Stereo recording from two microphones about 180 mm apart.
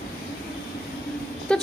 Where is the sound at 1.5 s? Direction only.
5° left (ahead or behind).